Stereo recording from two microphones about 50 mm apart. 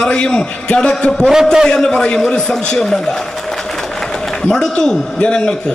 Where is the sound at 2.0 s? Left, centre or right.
Centre.